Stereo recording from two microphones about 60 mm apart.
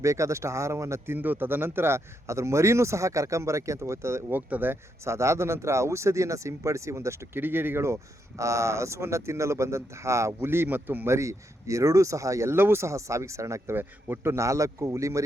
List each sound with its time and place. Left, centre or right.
0.0 s speech: right
1.1 s speech: right
2.2 s speech: right
4.3 s speech: right
5.0 s speech: right
7.3 s speech: right
8.4 s speech: right
10.4 s speech: right
11.1 s speech: right
12.5 s speech: right
13.7 s speech: right
14.3 s speech: right